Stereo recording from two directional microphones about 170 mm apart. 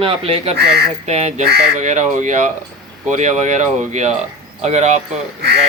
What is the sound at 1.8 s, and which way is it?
Speech, 45° right (ahead or behind).